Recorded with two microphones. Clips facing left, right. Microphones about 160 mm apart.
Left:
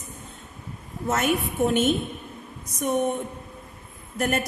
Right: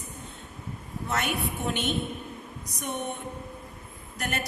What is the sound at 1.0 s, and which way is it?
Speech, 45° left (ahead or behind).